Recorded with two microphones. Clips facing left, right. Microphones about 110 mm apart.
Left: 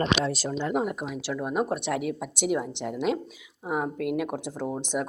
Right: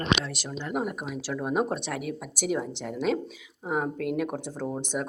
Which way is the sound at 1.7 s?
20° left (ahead or behind).